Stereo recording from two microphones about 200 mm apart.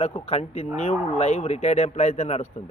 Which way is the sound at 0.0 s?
30° left (ahead or behind).